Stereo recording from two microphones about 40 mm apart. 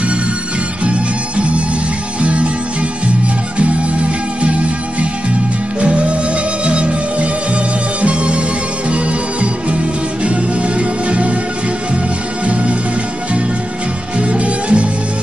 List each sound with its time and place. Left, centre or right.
0.8 s music: right
3.5 s music: right
5.8 s music: right
12.4 s music: right
14.1 s music: right